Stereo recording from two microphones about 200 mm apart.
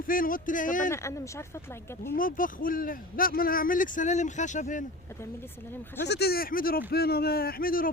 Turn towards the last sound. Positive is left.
turn(degrees=45)  # may be behind; listen again after turning